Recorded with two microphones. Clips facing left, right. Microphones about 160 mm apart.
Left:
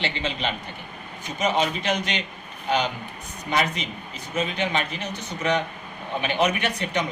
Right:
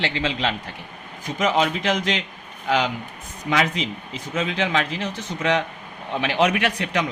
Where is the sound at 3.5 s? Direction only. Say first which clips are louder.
Right 3 dB; 90° right.